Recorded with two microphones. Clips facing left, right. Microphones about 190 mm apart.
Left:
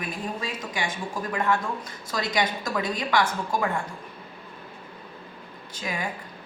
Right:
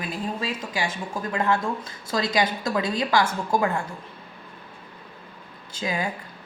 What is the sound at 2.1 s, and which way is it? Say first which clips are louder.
A woman's voice: right 3 dB; 25° right (ahead or behind).